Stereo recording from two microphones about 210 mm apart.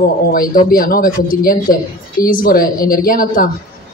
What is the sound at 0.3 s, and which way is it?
Speech, 45° left (ahead or behind).